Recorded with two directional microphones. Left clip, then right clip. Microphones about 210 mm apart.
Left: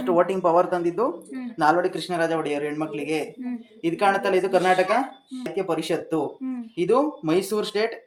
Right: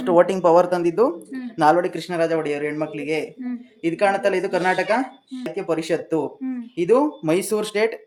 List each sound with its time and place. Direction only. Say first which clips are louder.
0.0 s speech: right 4 dB; 50° right (ahead or behind)